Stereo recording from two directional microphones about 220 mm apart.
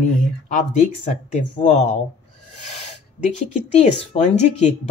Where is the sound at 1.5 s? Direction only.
30° left (ahead or behind).